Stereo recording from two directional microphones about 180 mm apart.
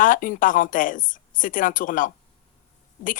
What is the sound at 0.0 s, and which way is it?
Speech, 50° left (ahead or behind).